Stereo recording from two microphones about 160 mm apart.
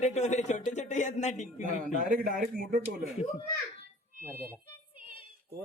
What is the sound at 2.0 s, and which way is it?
Speech, 60° right (ahead or behind).